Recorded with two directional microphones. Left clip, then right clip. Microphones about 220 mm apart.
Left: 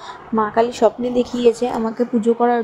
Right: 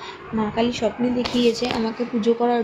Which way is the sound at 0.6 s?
35° left (ahead or behind).